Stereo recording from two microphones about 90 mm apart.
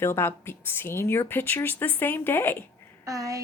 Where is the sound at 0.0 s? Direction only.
25° left (ahead or behind).